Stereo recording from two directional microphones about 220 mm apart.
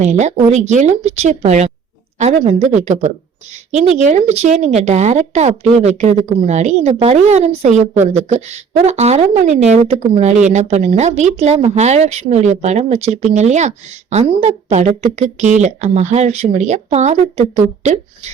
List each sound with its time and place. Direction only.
0.0 s a woman's voice: 30° right (ahead or behind)